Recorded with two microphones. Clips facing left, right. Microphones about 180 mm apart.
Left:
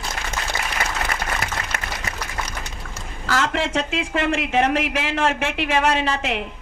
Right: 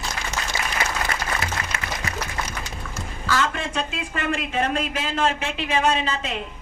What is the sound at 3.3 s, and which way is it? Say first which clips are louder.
Speech: left 4 dB; 85° left.